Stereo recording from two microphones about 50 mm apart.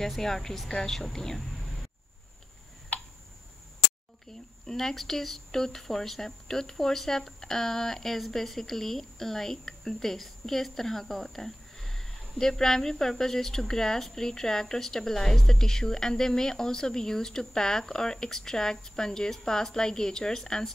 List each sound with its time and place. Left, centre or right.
0.0 s speech: centre
4.3 s speech: centre